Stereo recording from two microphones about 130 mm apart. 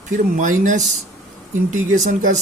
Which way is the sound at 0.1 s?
85° right.